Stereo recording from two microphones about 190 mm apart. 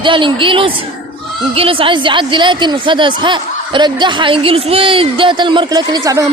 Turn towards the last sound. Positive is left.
turn(degrees=-20)  # may be behind; listen again after turning